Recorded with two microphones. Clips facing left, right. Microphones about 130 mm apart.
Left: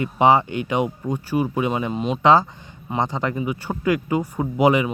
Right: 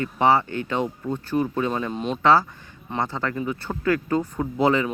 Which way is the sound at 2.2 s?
20° left (ahead or behind).